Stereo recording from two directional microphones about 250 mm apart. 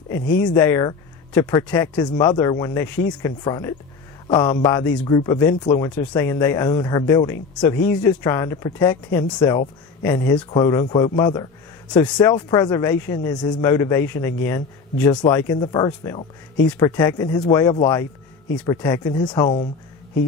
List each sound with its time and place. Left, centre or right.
0.5 s speech: centre
12.0 s speech: centre